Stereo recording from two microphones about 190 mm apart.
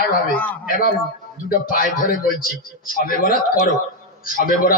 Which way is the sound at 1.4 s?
50° left (ahead or behind).